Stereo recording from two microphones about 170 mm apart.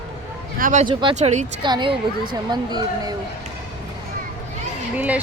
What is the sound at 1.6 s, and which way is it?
Speech, 30° right (ahead or behind).